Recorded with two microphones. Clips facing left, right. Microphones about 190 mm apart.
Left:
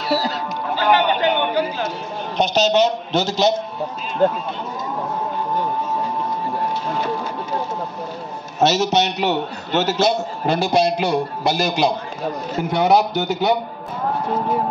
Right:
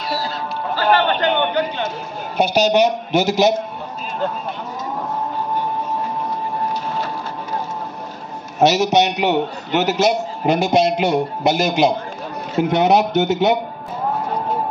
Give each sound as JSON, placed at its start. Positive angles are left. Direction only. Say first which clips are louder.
{"t": 0.7, "sound": "speech", "louder": "even", "side_deg": 15}
{"t": 2.3, "sound": "a man's voice", "louder": "right 1 dB", "side_deg": -10}
{"t": 4.2, "sound": "speech", "louder": "left 7 dB", "side_deg": 50}
{"t": 8.5, "sound": "a man's voice", "louder": "right 3 dB", "side_deg": -15}